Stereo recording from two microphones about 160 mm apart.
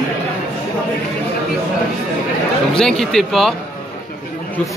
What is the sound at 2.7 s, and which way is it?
Speech, 5° left (ahead or behind).